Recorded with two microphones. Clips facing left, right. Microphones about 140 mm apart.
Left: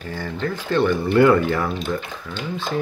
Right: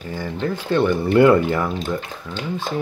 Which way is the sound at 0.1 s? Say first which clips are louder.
Right 2 dB; 15° right (ahead or behind).